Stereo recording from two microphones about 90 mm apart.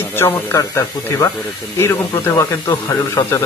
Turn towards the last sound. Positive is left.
turn(degrees=35)  # may be behind; listen again after turning